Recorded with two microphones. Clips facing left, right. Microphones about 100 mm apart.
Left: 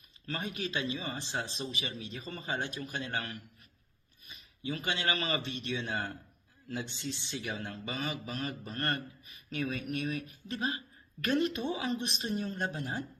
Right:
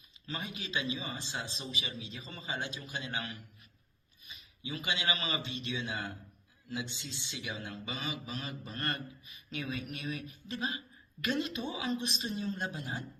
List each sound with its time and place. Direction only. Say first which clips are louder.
0.3 s speech: left 4 dB; 50° left (ahead or behind)